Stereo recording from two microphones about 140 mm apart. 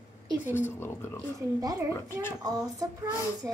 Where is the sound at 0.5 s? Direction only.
15° left (ahead or behind).